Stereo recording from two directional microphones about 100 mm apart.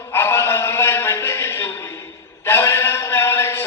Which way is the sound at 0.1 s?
25° left (ahead or behind).